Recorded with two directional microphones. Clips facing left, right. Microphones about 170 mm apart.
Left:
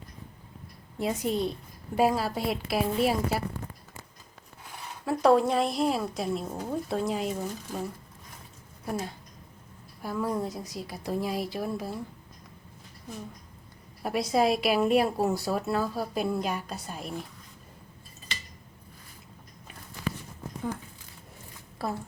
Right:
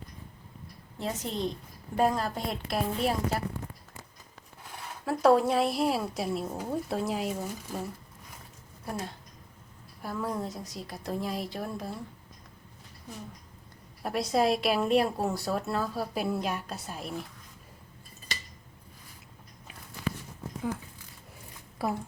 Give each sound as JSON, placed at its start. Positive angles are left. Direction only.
{"t": 0.9, "sound": "a woman's voice", "side_deg": 10}
{"t": 5.0, "sound": "a woman's voice", "side_deg": 0}
{"t": 10.0, "sound": "a woman's voice", "side_deg": 0}
{"t": 14.0, "sound": "a woman's voice", "side_deg": 0}
{"t": 21.8, "sound": "a woman's voice", "side_deg": -15}